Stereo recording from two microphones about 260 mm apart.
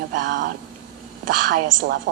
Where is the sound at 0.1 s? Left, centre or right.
Right.